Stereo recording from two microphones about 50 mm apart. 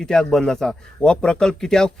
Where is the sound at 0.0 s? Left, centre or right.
Centre.